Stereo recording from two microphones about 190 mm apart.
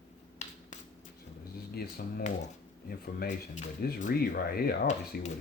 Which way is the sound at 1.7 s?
50° left (ahead or behind).